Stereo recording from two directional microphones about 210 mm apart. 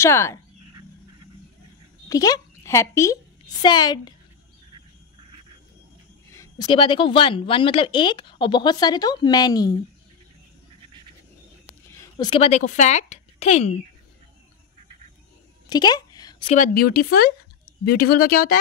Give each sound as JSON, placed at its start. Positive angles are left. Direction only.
{"t": 0.0, "sound": "speech", "side_deg": 15}
{"t": 2.0, "sound": "speech", "side_deg": 15}
{"t": 6.3, "sound": "speech", "side_deg": 15}
{"t": 12.0, "sound": "speech", "side_deg": 20}
{"t": 15.7, "sound": "a sound", "side_deg": 20}
{"t": 16.4, "sound": "speech", "side_deg": 40}